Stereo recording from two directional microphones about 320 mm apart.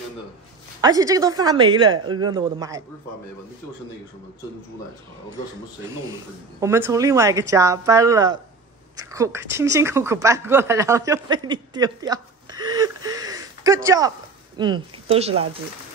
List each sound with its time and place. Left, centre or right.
0.7 s a woman's voice: centre
6.6 s a woman's voice: centre